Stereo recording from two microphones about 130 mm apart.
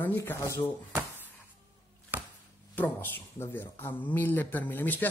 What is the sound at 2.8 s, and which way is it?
Speech, 15° left (ahead or behind).